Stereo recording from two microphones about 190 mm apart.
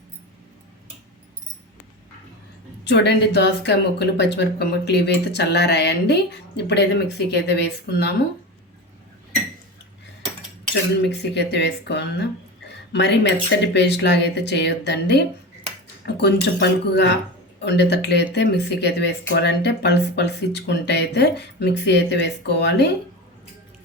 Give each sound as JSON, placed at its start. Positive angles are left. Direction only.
{"t": 2.8, "sound": "speech", "side_deg": 60}
{"t": 11.0, "sound": "speech", "side_deg": 60}